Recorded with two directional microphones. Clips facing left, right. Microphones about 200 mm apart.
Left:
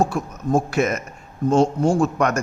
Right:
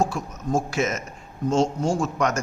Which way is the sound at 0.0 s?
60° left (ahead or behind).